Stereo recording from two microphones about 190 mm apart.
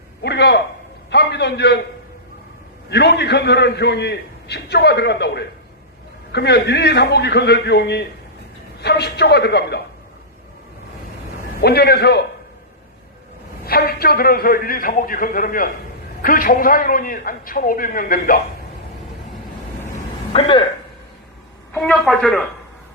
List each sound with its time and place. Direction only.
0.2 s a man's voice: 65° left (ahead or behind)
2.9 s a man's voice: 60° left (ahead or behind)
11.6 s a man's voice: 55° left (ahead or behind)
13.7 s a man's voice: 55° left (ahead or behind)
20.3 s speech: 25° left (ahead or behind)
21.7 s speech: 5° left (ahead or behind)